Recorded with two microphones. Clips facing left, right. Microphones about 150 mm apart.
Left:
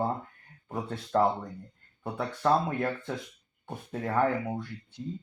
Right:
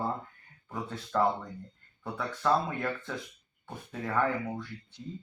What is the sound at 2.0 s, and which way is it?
Speech, 25° left (ahead or behind).